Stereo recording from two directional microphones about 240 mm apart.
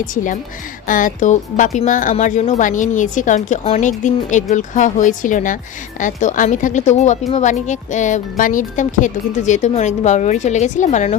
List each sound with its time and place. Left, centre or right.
0.0 s speech: left